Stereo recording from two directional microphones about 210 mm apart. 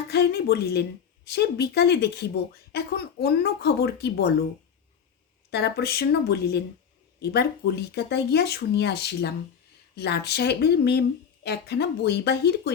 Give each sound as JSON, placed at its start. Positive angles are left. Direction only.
{"t": 0.1, "sound": "speech", "side_deg": 50}
{"t": 5.5, "sound": "speech", "side_deg": 50}